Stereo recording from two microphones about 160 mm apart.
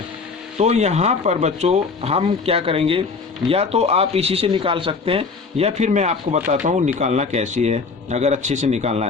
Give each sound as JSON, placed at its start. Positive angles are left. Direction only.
{"t": 0.5, "sound": "speech", "side_deg": -45}